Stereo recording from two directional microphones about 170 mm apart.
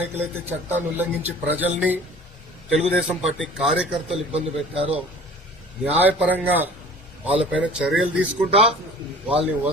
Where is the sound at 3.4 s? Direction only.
Centre (ahead or behind).